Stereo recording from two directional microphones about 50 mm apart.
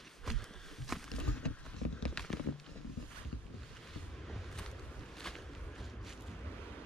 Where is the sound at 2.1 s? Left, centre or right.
Centre.